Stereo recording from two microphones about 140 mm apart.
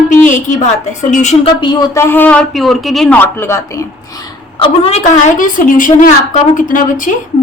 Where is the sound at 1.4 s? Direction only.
35° left (ahead or behind).